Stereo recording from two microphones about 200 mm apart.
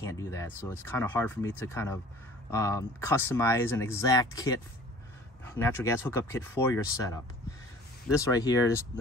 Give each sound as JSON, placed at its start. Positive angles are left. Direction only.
{"t": 0.0, "sound": "speech", "side_deg": 15}
{"t": 8.2, "sound": "speech", "side_deg": 15}